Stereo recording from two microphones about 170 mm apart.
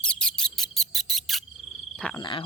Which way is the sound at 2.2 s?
30° left (ahead or behind).